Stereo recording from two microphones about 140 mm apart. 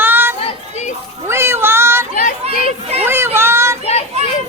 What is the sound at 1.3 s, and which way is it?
Cat, 20° right (ahead or behind).